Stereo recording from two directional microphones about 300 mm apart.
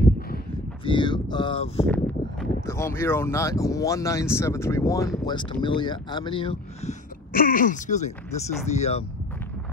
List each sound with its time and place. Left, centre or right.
0.8 s speech: centre